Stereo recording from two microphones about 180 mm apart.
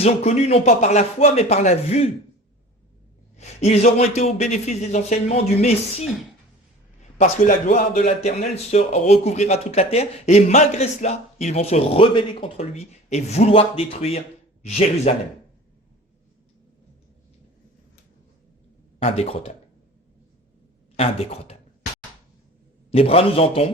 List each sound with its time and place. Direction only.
0.0 s speech: 35° left (ahead or behind)
3.3 s speech: 40° left (ahead or behind)
7.2 s speech: 45° left (ahead or behind)
19.0 s speech: 35° left (ahead or behind)
20.9 s speech: 35° left (ahead or behind)
22.9 s speech: 35° left (ahead or behind)